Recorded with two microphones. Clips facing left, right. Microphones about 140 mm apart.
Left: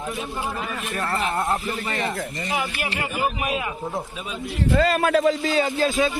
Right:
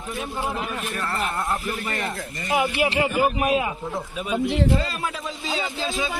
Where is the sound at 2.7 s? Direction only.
25° right (ahead or behind).